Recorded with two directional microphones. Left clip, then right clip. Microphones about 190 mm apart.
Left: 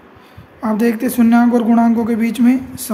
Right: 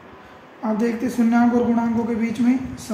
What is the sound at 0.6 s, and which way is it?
Speech, 50° left (ahead or behind).